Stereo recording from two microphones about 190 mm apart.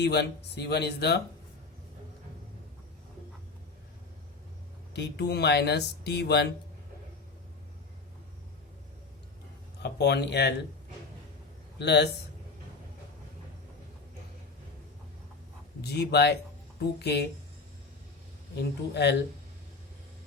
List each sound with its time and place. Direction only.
0.0 s speech: 60° left (ahead or behind)
4.9 s speech: 60° left (ahead or behind)
9.8 s speech: 60° left (ahead or behind)
11.8 s speech: 65° left (ahead or behind)
15.8 s speech: 60° left (ahead or behind)
18.5 s speech: 60° left (ahead or behind)